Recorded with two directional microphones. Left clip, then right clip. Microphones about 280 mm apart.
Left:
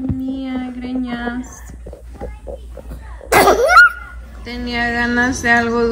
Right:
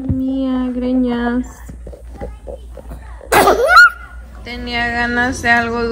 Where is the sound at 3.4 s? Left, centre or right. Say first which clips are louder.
Right 1 dB; centre.